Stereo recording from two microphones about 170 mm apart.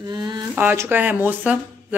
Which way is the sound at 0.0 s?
25° right (ahead or behind).